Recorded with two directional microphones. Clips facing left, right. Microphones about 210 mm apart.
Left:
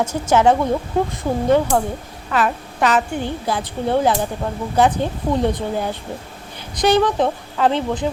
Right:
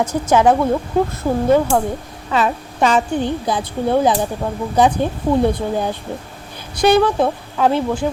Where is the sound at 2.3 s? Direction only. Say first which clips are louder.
Right 2 dB; 20° right (ahead or behind).